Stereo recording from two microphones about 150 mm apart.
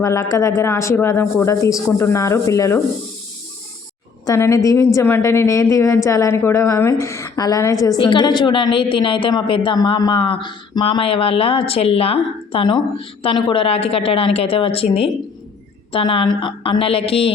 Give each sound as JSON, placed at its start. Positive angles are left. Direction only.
{"t": 0.0, "sound": "speech", "side_deg": 20}
{"t": 4.3, "sound": "a woman's voice", "side_deg": 20}